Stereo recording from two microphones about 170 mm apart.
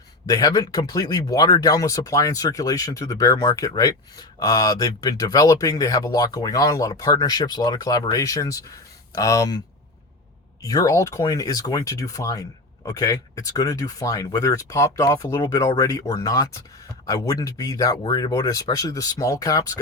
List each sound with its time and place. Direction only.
0.3 s speech: 20° left (ahead or behind)
10.6 s speech: 20° left (ahead or behind)